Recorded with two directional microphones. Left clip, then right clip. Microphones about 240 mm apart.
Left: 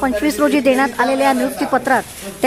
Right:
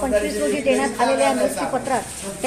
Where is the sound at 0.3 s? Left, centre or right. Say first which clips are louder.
Left 6 dB; left.